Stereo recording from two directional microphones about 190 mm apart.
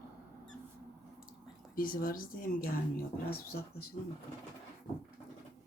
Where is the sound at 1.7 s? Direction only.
45° left (ahead or behind).